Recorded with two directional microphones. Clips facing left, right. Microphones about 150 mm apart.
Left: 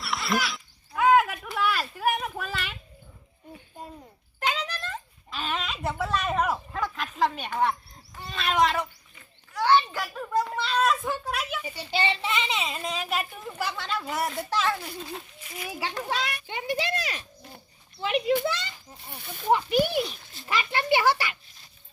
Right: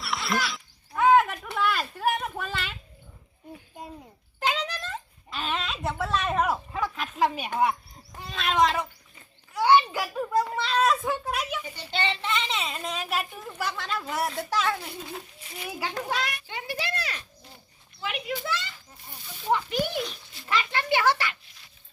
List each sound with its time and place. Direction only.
0.0 s a sound: centre (ahead or behind)
4.4 s a sound: centre (ahead or behind)
8.2 s a child's voice: centre (ahead or behind)
9.6 s children playing: 10° right (ahead or behind)
10.6 s a child's voice: centre (ahead or behind)
11.6 s a child's voice: 10° left (ahead or behind)
16.5 s speech: 20° left (ahead or behind)
18.0 s a child's voice: 25° left (ahead or behind)
19.1 s speech: 60° left (ahead or behind)
19.5 s speech: 15° left (ahead or behind)